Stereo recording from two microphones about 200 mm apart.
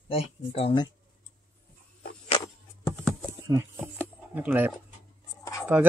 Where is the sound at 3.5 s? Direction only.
15° right (ahead or behind).